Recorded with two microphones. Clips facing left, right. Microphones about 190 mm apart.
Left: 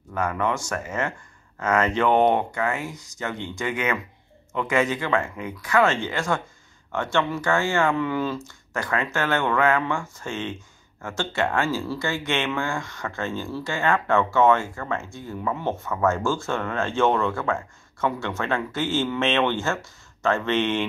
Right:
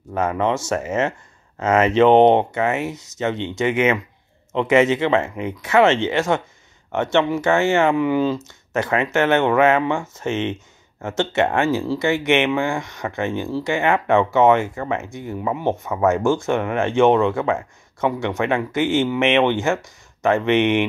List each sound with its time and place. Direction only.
0.1 s speech: 20° right (ahead or behind)